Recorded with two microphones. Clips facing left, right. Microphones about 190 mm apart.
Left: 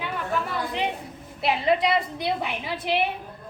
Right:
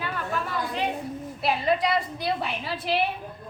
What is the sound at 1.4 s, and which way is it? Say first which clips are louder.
A woman's voice: left 2 dB; 20° left (ahead or behind).